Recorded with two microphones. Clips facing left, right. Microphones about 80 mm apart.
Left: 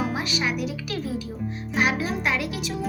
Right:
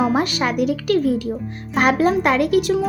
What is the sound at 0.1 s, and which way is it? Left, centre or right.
A child's voice, right.